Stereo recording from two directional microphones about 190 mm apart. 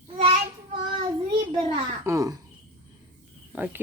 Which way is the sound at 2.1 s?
20° right (ahead or behind).